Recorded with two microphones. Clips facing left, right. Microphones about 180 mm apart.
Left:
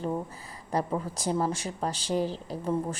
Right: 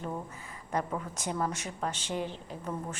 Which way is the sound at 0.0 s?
35° left (ahead or behind).